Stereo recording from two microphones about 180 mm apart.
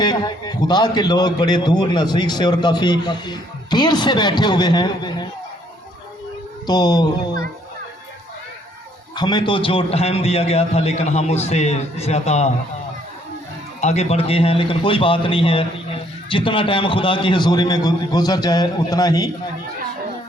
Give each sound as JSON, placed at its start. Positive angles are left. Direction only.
{"t": 0.0, "sound": "a man's voice", "side_deg": 25}
{"t": 6.7, "sound": "a man's voice", "side_deg": 25}
{"t": 9.1, "sound": "a man's voice", "side_deg": 25}
{"t": 13.8, "sound": "a man's voice", "side_deg": 40}